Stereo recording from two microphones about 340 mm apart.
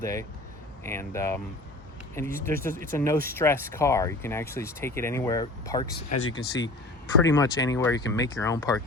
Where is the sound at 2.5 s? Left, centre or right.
Right.